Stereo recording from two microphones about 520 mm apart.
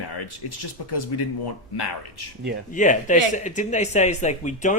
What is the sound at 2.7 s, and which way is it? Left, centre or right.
Speech, centre.